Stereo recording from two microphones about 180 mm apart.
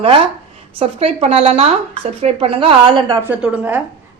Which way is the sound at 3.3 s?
10° right (ahead or behind).